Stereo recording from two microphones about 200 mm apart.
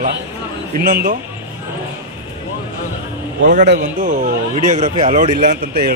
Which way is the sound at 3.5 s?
40° right (ahead or behind).